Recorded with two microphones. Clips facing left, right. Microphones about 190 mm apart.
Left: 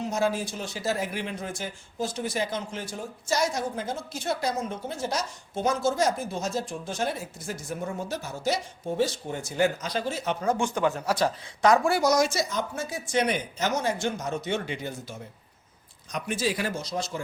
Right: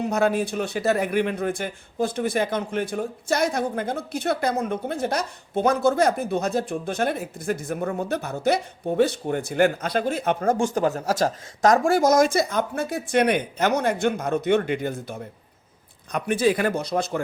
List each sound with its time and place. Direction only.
0.0 s speech: 60° right (ahead or behind)